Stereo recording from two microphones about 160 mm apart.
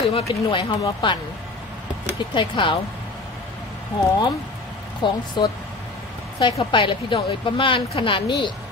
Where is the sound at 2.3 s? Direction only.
30° left (ahead or behind).